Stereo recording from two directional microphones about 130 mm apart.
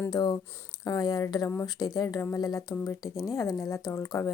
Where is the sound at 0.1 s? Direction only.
30° left (ahead or behind).